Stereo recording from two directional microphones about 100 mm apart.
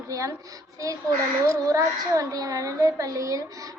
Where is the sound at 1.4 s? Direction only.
30° right (ahead or behind).